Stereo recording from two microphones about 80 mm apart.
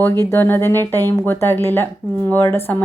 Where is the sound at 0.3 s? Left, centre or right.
Left.